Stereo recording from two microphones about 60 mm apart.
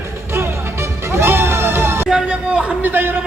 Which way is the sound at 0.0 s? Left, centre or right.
Right.